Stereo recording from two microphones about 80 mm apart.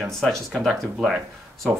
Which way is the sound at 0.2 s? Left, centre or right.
Centre.